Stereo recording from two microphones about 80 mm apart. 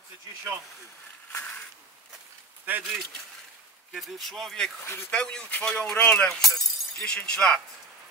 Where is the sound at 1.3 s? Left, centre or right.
Centre.